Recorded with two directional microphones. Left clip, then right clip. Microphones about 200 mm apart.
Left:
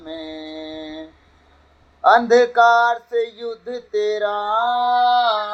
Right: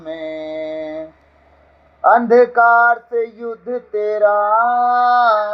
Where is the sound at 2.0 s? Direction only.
15° right (ahead or behind).